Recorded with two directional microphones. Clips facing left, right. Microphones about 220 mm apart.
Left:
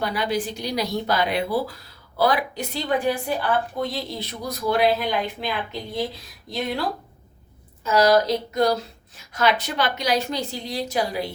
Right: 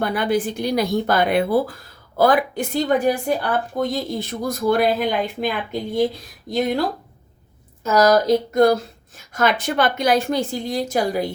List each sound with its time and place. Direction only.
0.0 s speech: 55° right (ahead or behind)
7.9 s speech: 45° right (ahead or behind)